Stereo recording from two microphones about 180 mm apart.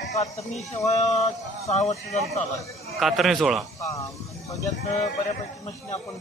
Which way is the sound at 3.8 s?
15° left (ahead or behind).